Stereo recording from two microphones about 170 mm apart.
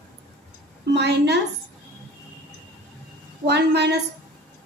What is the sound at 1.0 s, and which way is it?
Speech, 85° right.